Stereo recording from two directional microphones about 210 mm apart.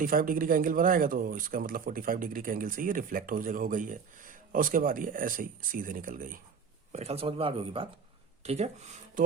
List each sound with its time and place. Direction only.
0.0 s speech: 40° right (ahead or behind)
6.9 s speech: 30° right (ahead or behind)